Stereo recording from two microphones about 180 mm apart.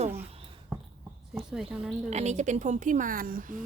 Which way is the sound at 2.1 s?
40° right (ahead or behind).